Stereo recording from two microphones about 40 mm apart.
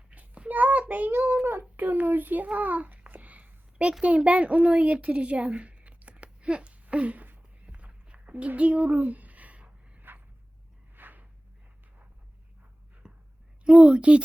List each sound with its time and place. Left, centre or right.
0.1 s a sound: right
1.5 s a child's voice: right
1.8 s a child's voice: right
2.6 s babbling: right
4.0 s a woman's voice: right
6.9 s a sound: right
7.7 s walk: right
8.4 s speech: right
10.1 s vehicle: right
10.9 s a sound: right
13.0 s a sound: right
13.7 s a woman's voice: right